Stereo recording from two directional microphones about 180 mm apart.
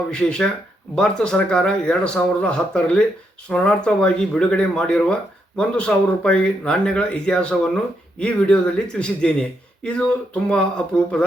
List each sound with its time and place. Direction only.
0.1 s speech: 5° left (ahead or behind)